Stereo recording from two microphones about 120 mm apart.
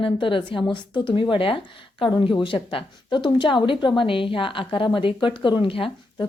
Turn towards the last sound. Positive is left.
turn(degrees=45)  # may be behind; listen again after turning